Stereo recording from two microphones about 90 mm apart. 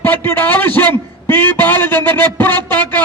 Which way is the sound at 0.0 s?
25° left (ahead or behind).